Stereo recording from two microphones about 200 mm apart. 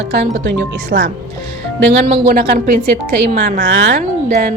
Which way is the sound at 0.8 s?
50° right (ahead or behind).